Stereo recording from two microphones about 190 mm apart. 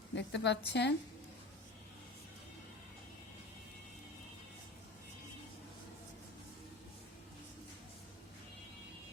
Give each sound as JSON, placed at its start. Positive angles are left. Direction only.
{"t": 0.1, "sound": "a woman's voice", "side_deg": 70}